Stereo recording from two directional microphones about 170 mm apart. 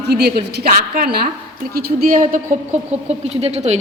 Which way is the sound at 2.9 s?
40° right (ahead or behind).